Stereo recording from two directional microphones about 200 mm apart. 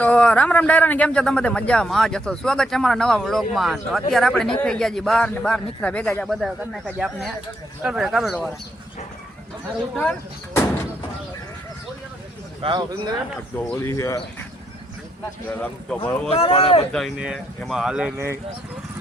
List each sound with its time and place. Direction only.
0.0 s a man's voice: 5° left (ahead or behind)
9.9 s speech: 5° left (ahead or behind)
12.6 s speech: 20° right (ahead or behind)
13.6 s speech: 10° left (ahead or behind)
16.0 s speech: 5° left (ahead or behind)
16.3 s speech: 30° left (ahead or behind)
16.9 s a man's voice: centre (ahead or behind)